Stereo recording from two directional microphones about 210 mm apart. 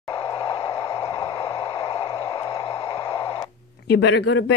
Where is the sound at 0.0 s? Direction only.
15° left (ahead or behind).